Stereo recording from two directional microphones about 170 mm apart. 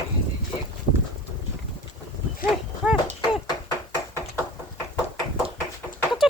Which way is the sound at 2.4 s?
55° left (ahead or behind).